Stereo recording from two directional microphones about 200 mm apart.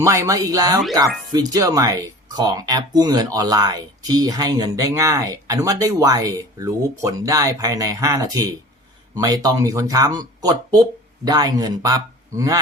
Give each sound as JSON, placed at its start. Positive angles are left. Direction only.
{"t": 0.0, "sound": "speech", "side_deg": -15}